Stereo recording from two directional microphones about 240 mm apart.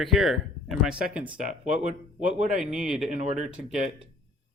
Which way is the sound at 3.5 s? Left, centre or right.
Centre.